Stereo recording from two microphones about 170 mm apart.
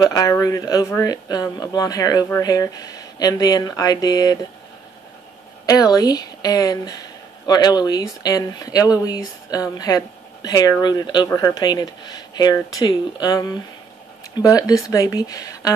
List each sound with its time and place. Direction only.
0.0 s speech: 20° left (ahead or behind)
5.7 s speech: 20° left (ahead or behind)